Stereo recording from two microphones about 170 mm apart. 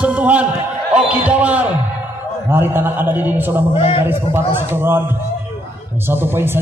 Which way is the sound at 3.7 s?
35° left (ahead or behind).